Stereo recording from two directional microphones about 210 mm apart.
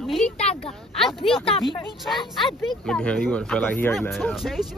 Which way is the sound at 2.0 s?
Centre (ahead or behind).